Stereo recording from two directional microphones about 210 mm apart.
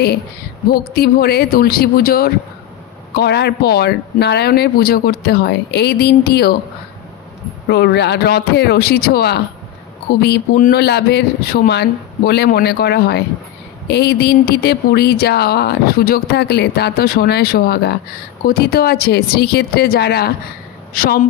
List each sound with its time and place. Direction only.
0.7 s speech: 45° left (ahead or behind)
7.7 s speech: 50° left (ahead or behind)